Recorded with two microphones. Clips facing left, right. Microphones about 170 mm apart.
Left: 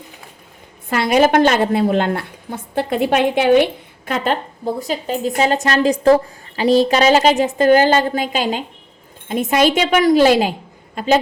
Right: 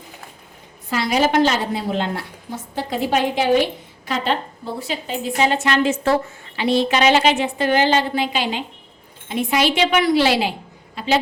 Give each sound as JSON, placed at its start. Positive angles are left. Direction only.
{"t": 0.9, "sound": "a woman's voice", "side_deg": 55}